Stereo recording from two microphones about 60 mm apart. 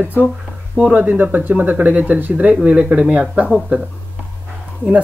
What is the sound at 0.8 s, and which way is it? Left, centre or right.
Speech, right.